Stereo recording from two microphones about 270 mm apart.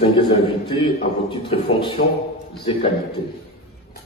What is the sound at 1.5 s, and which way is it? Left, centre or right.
Speech, left.